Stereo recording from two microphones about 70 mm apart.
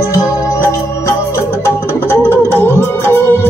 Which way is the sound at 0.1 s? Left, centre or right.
Left.